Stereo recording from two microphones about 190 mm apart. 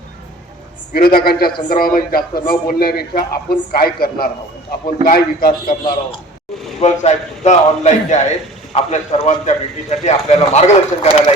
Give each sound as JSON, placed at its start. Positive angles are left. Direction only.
{"t": 0.9, "sound": "speech", "side_deg": 50}
{"t": 6.7, "sound": "a man's voice", "side_deg": 35}